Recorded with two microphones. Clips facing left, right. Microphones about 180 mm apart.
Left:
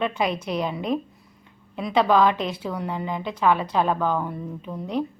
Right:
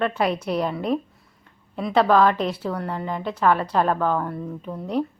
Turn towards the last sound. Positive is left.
turn(degrees=-5)  # may be behind; listen again after turning